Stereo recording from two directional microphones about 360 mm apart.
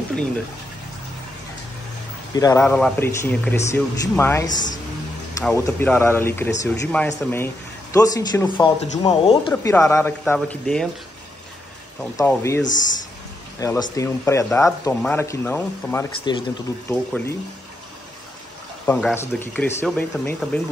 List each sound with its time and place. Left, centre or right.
2.3 s speech: centre
9.5 s speech: centre
12.0 s speech: centre
18.9 s speech: centre